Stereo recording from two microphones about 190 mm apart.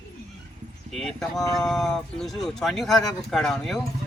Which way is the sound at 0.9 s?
Centre (ahead or behind).